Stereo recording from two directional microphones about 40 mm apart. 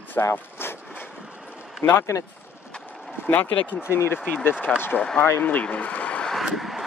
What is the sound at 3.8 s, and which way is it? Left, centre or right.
Speech, left.